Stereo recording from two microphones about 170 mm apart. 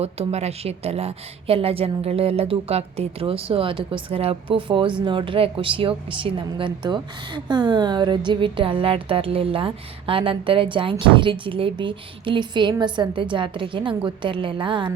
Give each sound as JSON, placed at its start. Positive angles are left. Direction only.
{"t": 0.0, "sound": "a woman's voice", "side_deg": -40}